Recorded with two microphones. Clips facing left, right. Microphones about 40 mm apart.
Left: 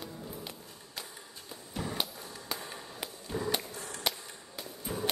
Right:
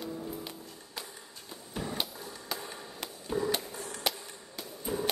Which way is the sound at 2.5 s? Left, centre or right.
Centre.